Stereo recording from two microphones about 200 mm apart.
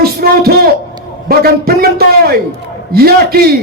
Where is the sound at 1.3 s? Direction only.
50° right (ahead or behind).